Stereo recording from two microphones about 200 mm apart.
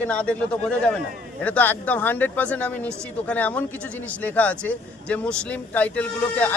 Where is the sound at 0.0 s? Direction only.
5° left (ahead or behind).